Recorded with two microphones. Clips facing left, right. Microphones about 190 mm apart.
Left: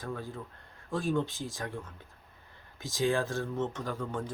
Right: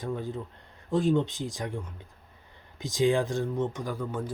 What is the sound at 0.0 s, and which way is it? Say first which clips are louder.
Speech: right 5 dB; 20° right (ahead or behind).